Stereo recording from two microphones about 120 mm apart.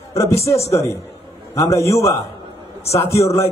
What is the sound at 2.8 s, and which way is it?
Speech, 60° left (ahead or behind).